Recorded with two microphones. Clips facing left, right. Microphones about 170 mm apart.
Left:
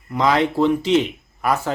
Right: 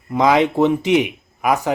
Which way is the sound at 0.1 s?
15° right (ahead or behind).